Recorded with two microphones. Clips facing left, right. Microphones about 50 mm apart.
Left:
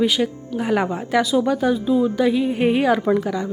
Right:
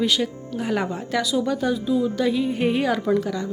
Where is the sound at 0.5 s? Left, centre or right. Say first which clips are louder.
Left 4 dB; left.